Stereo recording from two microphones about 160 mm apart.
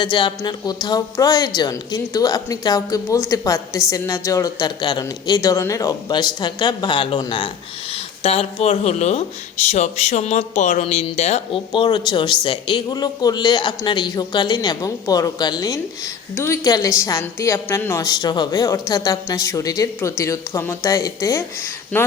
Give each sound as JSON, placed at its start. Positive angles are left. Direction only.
{"t": 0.0, "sound": "a woman's voice", "side_deg": 30}